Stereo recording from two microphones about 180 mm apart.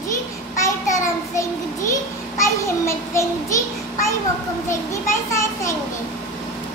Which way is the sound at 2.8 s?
15° left (ahead or behind).